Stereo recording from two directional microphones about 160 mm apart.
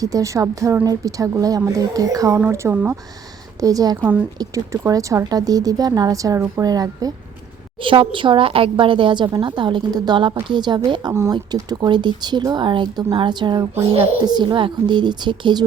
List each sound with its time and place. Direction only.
0.0 s a woman's voice: 20° right (ahead or behind)
11.1 s a woman's voice: 20° right (ahead or behind)